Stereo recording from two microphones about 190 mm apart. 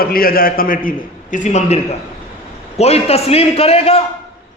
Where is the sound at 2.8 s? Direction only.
35° left (ahead or behind).